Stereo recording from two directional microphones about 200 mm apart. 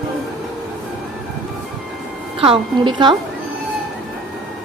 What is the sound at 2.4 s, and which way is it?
Speech, 25° right (ahead or behind).